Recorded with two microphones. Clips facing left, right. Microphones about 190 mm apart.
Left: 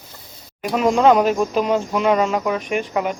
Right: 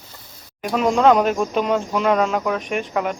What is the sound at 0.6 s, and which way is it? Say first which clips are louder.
Speech: left 1 dB; centre (ahead or behind).